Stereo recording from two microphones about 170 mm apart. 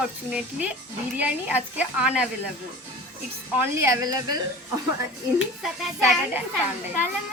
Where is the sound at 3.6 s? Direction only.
15° right (ahead or behind).